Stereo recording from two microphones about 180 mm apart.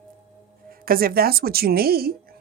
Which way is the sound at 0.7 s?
55° right (ahead or behind).